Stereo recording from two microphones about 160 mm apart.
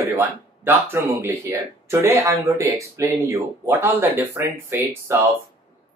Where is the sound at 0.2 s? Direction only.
15° right (ahead or behind).